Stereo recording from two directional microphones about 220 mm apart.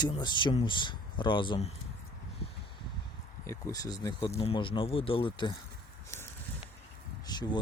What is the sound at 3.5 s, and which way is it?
Speech, 15° left (ahead or behind).